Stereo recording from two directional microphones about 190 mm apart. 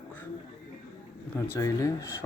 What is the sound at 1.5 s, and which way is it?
Speech, 15° left (ahead or behind).